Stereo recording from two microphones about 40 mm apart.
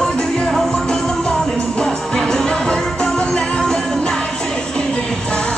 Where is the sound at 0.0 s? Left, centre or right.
Centre.